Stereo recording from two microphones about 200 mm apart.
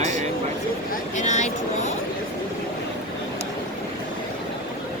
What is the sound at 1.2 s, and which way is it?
Vehicle, 35° left (ahead or behind).